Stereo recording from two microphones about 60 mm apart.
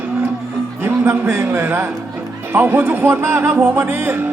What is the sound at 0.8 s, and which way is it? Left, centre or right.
A man's voice, right.